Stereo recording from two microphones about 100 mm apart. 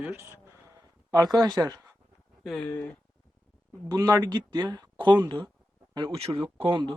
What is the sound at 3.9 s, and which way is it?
Speech, 40° right (ahead or behind).